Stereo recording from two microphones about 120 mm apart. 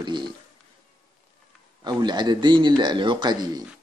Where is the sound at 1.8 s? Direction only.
35° right (ahead or behind).